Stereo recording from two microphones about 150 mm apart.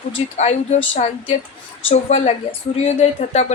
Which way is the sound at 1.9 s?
45° left (ahead or behind).